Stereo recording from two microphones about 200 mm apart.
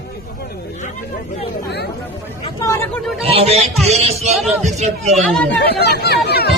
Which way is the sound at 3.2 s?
30° right (ahead or behind).